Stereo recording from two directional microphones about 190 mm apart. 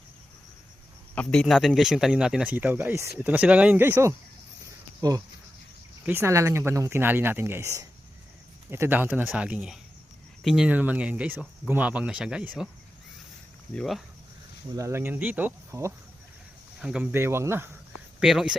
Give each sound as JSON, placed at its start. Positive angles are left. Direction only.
{"t": 1.1, "sound": "a man's voice", "side_deg": 5}
{"t": 13.7, "sound": "a man's voice", "side_deg": 0}
{"t": 14.8, "sound": "speech", "side_deg": -15}
{"t": 18.2, "sound": "a man's voice", "side_deg": 0}